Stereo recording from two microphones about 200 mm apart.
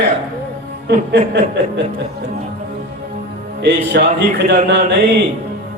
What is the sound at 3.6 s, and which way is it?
A man's voice, 55° right (ahead or behind).